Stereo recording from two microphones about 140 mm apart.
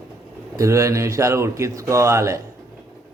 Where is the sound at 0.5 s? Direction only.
20° right (ahead or behind).